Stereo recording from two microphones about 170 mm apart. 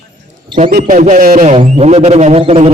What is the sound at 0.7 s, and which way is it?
Music, 60° right (ahead or behind).